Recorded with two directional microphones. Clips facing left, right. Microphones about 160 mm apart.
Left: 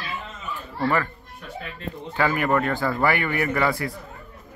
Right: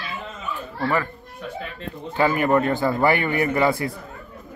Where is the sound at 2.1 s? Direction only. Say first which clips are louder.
Right 3 dB; 25° right (ahead or behind).